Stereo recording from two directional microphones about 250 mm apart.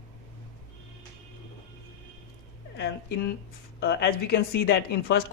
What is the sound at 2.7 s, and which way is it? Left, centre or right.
Speech, left.